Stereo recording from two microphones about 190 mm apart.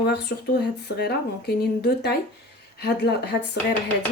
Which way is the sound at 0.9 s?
60° left (ahead or behind).